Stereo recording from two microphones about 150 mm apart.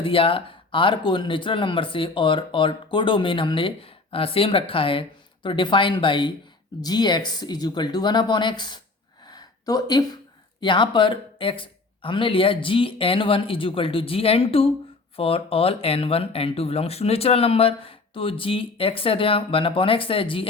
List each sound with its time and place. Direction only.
0.0 s speech: 35° left (ahead or behind)
9.2 s a sound: 25° left (ahead or behind)
10.6 s speech: 30° left (ahead or behind)